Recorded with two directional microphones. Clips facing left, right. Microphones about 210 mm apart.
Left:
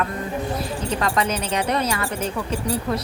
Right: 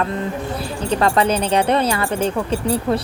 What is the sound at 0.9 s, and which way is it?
Speech, 30° right (ahead or behind).